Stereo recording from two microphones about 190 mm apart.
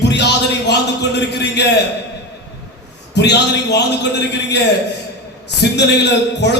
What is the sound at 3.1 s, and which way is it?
Speech, 65° left (ahead or behind).